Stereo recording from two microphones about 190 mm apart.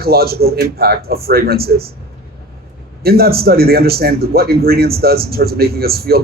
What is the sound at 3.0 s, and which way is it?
A man's voice, 55° right (ahead or behind).